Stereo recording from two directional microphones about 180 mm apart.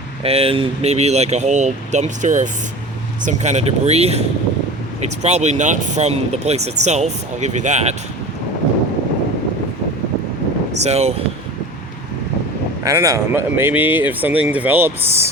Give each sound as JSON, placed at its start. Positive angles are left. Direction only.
{"t": 0.2, "sound": "speech", "side_deg": -35}
{"t": 10.8, "sound": "speech", "side_deg": -35}
{"t": 12.8, "sound": "speech", "side_deg": -20}